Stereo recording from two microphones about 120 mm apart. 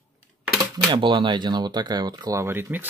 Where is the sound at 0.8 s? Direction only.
40° right (ahead or behind).